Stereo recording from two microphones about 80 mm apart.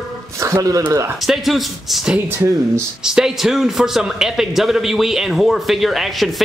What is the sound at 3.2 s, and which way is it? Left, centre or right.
A man's voice, centre.